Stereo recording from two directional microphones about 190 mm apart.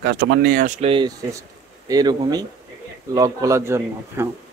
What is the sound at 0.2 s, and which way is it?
Speech, 55° right (ahead or behind).